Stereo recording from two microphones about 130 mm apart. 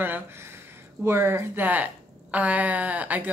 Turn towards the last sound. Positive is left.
turn(degrees=-10)  # may be behind; listen again after turning